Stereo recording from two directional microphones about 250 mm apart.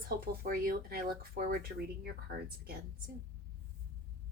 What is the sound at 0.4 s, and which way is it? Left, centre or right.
Speech, right.